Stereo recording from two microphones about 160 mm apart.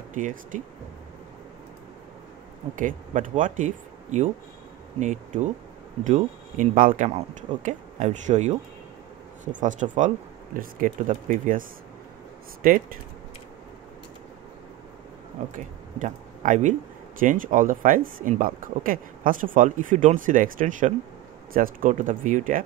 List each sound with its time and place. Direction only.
0.1 s speech: 55° right (ahead or behind)
2.7 s speech: 55° right (ahead or behind)
15.5 s speech: 55° right (ahead or behind)